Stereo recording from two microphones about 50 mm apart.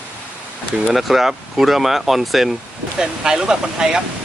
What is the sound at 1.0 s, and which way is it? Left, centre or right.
Speech, centre.